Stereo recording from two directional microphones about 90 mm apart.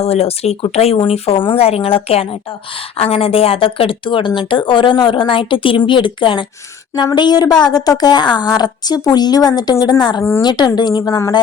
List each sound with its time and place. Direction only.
0.0 s a woman's voice: 90° left; by 6.4 s 65° left (ahead or behind)
7.1 s a woman's voice: 50° left (ahead or behind)